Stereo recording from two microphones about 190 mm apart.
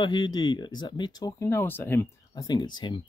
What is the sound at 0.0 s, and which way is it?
Speech, 20° left (ahead or behind).